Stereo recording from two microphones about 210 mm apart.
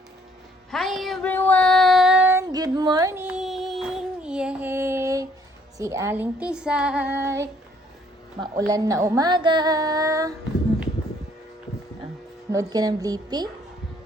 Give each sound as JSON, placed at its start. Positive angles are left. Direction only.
{"t": 0.7, "sound": "child singing", "side_deg": 0}
{"t": 5.7, "sound": "speech", "side_deg": -15}
{"t": 12.5, "sound": "speech", "side_deg": -15}